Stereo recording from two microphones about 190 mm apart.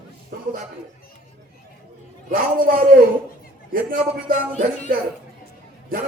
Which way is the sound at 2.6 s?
45° right (ahead or behind).